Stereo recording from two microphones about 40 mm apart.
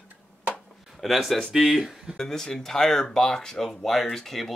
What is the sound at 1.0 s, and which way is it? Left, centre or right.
Speech, centre.